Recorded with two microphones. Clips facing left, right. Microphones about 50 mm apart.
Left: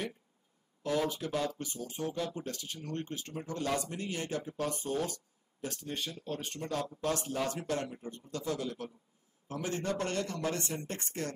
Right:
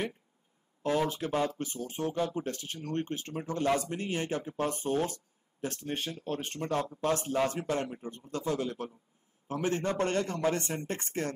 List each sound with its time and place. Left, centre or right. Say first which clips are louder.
0.8 s speech: right 3 dB; right